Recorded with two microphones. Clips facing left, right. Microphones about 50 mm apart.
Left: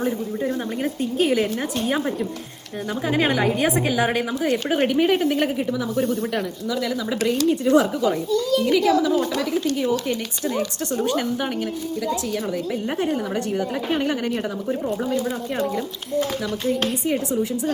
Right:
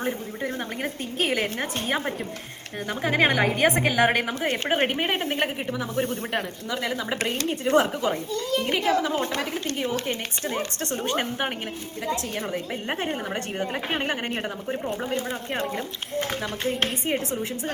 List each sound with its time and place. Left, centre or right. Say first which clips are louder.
0.0 s a woman's voice: left 5 dB; right
13.0 s a woman's voice: left 5 dB; right
16.6 s a woman's voice: left 4 dB; right